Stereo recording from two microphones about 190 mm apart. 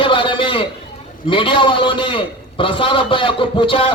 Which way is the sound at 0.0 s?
25° left (ahead or behind).